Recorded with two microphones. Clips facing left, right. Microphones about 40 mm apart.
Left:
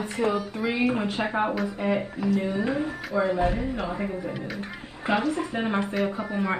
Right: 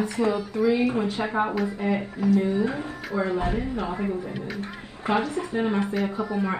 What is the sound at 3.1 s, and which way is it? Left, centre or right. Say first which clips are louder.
Speech: left 1 dB; left.